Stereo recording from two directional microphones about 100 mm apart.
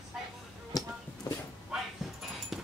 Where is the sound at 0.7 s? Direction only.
40° left (ahead or behind).